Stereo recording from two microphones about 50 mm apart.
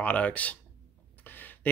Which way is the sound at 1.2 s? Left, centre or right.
Left.